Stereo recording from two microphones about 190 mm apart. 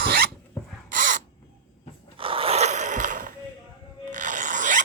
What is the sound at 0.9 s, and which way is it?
Crow, 45° right (ahead or behind).